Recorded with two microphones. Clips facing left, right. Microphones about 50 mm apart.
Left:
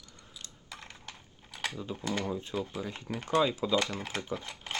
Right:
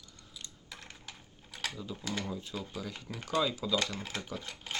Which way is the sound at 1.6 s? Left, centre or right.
Left.